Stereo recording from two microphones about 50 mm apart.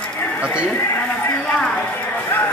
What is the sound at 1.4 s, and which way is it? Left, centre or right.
Speech, left.